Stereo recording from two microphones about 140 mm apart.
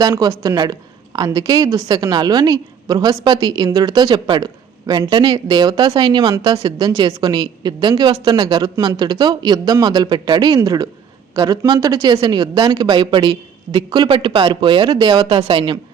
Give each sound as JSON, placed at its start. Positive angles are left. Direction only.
{"t": 0.0, "sound": "a woman's voice", "side_deg": -25}